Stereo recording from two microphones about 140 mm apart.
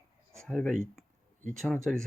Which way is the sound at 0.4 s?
10° left (ahead or behind).